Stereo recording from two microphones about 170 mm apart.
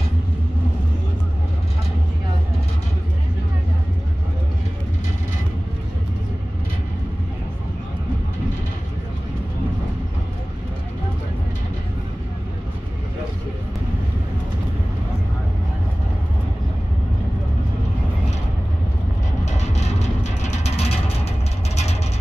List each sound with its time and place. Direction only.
19.4 s music: 40° left (ahead or behind)